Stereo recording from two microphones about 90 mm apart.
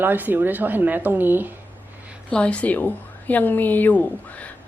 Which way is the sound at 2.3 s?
15° left (ahead or behind).